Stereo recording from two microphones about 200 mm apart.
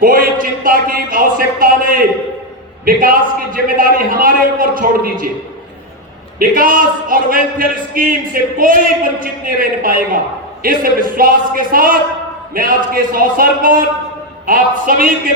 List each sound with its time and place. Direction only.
0.0 s a man's voice: 45° right (ahead or behind)
6.4 s a man's voice: 45° right (ahead or behind)